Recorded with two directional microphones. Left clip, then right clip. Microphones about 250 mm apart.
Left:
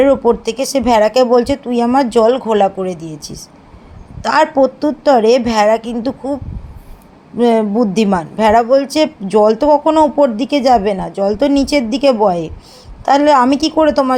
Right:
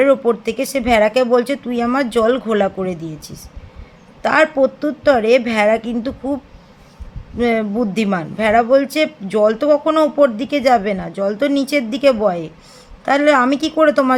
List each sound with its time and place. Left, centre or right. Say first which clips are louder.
0.0 s speech: left 3 dB; centre
7.3 s speech: left 5 dB; centre